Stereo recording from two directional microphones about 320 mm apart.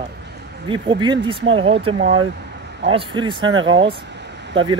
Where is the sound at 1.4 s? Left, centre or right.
Right.